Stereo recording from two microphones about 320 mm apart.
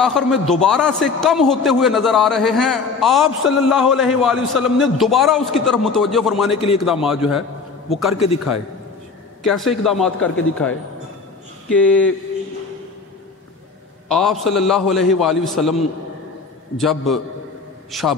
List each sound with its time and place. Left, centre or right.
0.0 s a man's voice: centre
6.5 s a man's voice: centre
6.8 s a man's voice: centre
9.4 s a man's voice: centre
11.7 s a man's voice: centre
14.0 s a man's voice: centre